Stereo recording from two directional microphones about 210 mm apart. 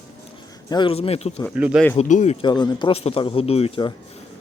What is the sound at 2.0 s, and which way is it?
Speech, 35° left (ahead or behind).